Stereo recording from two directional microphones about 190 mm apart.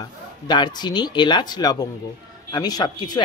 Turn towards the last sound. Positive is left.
turn(degrees=20)  # may be behind; listen again after turning